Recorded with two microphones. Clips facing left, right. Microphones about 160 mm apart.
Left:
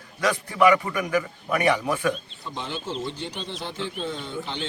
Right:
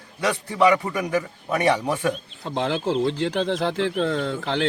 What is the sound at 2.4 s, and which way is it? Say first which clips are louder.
Speech: right 12 dB; 90° right.